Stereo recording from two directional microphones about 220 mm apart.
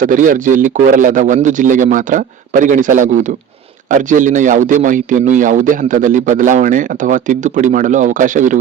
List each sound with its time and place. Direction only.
0.0 s a man's voice: 40° right (ahead or behind)